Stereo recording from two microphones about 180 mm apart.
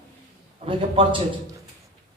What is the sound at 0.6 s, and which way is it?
Speech, 30° right (ahead or behind).